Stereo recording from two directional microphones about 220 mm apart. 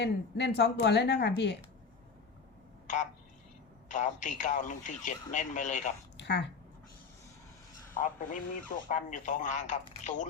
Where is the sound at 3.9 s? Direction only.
35° left (ahead or behind).